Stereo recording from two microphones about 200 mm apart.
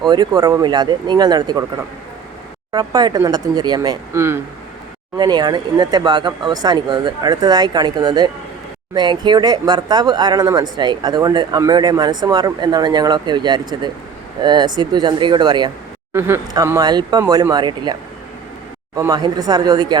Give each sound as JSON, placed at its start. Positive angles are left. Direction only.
{"t": 0.0, "sound": "speech", "side_deg": -20}
{"t": 2.7, "sound": "speech", "side_deg": -20}
{"t": 16.1, "sound": "speech", "side_deg": -10}
{"t": 18.9, "sound": "speech", "side_deg": -20}